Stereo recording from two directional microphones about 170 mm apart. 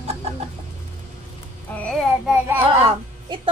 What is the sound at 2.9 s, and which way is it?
Speech, 30° right (ahead or behind).